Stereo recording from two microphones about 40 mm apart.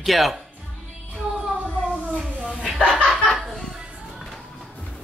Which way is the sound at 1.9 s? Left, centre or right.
Right.